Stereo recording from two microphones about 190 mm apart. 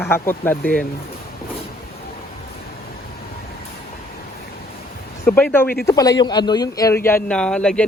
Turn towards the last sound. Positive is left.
turn(degrees=5)  # may be behind; listen again after turning